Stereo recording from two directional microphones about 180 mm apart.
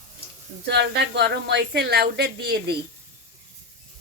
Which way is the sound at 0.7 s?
70° right (ahead or behind).